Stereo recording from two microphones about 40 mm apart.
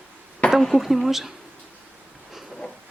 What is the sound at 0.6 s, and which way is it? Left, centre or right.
Speech, centre.